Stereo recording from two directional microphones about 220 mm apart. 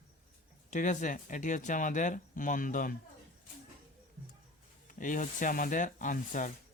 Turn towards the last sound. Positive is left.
turn(degrees=35)  # may be behind; listen again after turning